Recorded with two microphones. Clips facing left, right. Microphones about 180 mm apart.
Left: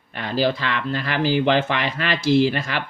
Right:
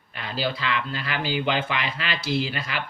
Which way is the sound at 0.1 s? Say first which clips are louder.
Left 7 dB; 50° left (ahead or behind).